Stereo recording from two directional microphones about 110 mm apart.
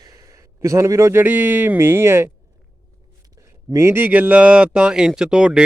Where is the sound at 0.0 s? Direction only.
35° right (ahead or behind).